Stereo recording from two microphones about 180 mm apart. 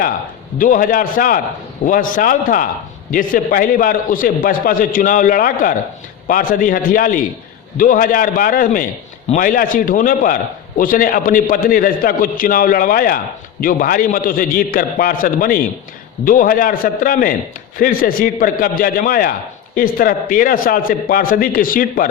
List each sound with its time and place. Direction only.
0.6 s a man's voice: 50° left (ahead or behind)